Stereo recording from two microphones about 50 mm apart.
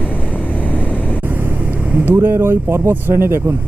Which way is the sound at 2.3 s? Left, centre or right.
Right.